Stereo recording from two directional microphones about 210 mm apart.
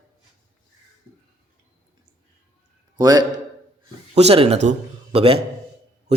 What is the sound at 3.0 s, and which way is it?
A man's voice, 20° right (ahead or behind).